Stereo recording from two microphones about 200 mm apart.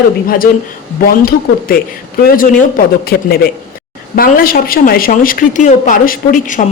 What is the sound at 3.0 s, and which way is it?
A woman's voice, 50° left (ahead or behind).